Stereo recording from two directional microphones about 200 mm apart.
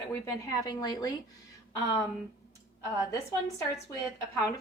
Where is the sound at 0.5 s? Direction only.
20° left (ahead or behind).